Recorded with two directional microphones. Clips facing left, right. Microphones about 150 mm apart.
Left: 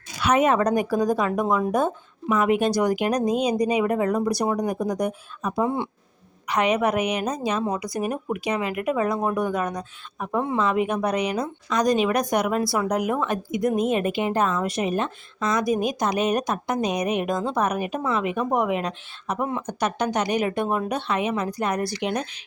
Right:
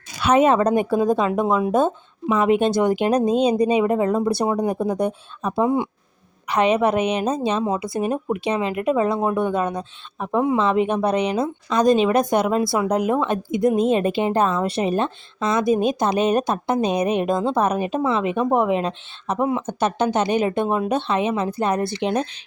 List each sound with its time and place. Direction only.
0.2 s a woman's voice: 30° right (ahead or behind)
5.6 s speech: 15° right (ahead or behind)
6.5 s a woman's voice: 30° right (ahead or behind)